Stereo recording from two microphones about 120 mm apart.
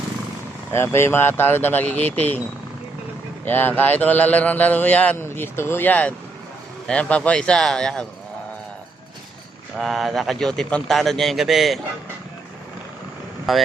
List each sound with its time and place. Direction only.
0.7 s speech: 20° left (ahead or behind)
3.4 s speech: 15° left (ahead or behind)
9.7 s a man's voice: centre (ahead or behind)
13.5 s a man's voice: centre (ahead or behind)